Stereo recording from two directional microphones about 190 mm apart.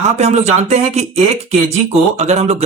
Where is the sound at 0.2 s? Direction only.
35° right (ahead or behind).